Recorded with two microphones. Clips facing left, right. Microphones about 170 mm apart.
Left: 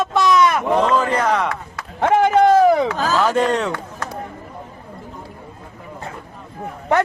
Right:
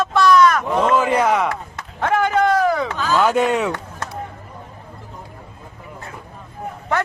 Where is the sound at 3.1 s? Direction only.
10° right (ahead or behind).